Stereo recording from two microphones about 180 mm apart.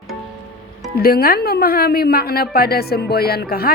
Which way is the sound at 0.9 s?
60° left (ahead or behind).